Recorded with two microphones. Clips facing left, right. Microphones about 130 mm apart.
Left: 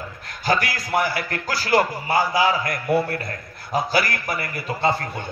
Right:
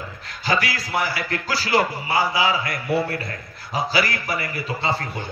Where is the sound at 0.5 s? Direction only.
50° left (ahead or behind).